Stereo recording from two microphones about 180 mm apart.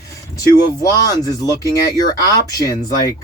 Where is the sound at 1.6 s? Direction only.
20° left (ahead or behind).